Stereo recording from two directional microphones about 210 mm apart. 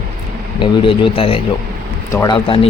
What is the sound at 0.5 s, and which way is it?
Speech, 25° left (ahead or behind).